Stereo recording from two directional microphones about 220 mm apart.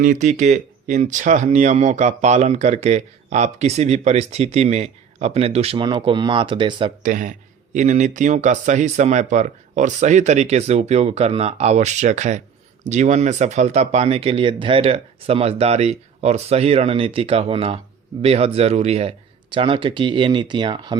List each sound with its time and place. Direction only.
0.0 s speech: 35° right (ahead or behind)
7.0 s speech: 35° right (ahead or behind); by 21.0 s 20° right (ahead or behind)